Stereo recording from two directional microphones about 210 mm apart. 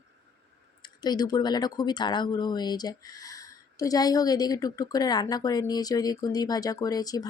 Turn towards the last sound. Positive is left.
turn(degrees=15)  # may be behind; listen again after turning